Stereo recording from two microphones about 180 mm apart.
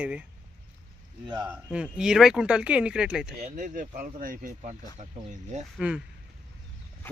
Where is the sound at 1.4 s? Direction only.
5° right (ahead or behind).